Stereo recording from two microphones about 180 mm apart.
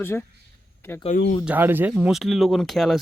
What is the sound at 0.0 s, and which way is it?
Speech, 10° left (ahead or behind).